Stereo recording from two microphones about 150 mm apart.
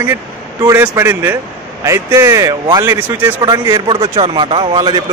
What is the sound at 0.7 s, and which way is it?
A man's voice, 15° right (ahead or behind).